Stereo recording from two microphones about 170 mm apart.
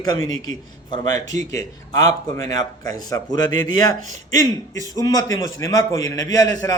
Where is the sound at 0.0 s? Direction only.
20° left (ahead or behind).